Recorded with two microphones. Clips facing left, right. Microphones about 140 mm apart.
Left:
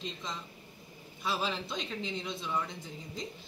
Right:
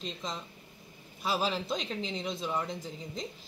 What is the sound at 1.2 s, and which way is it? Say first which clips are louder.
Speech: right 3 dB; 35° right (ahead or behind).